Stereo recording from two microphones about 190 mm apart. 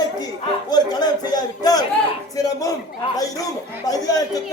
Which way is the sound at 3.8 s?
20° left (ahead or behind).